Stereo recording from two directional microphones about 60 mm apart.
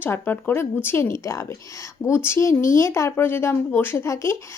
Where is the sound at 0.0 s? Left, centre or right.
Left.